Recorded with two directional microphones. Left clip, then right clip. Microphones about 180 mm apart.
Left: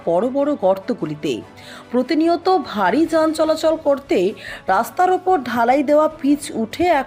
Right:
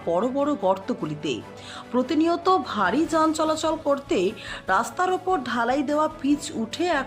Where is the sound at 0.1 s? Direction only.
15° left (ahead or behind).